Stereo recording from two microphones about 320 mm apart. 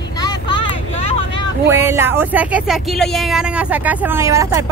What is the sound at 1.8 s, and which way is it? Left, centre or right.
Speech, centre.